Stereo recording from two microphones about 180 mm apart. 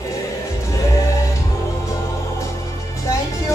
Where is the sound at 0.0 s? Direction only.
15° left (ahead or behind).